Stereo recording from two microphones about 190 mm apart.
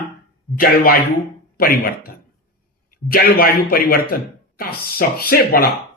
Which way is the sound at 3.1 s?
50° left (ahead or behind).